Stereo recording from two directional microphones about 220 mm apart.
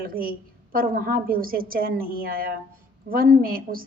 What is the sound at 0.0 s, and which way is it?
A woman's voice, 40° right (ahead or behind).